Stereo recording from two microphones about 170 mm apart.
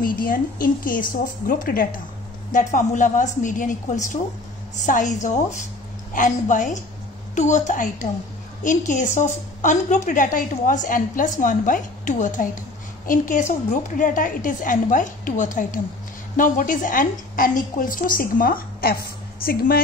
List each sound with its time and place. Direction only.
0.0 s a woman's voice: 55° left (ahead or behind)
2.5 s a woman's voice: 45° left (ahead or behind); by 19.8 s 60° left (ahead or behind)